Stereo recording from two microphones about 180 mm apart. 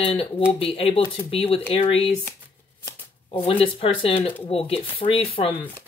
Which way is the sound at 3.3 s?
30° left (ahead or behind).